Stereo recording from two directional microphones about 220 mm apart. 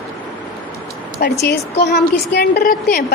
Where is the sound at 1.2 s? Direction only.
45° left (ahead or behind).